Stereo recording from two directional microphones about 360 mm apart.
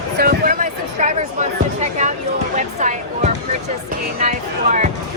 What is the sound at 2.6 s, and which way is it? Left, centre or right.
Speech, centre.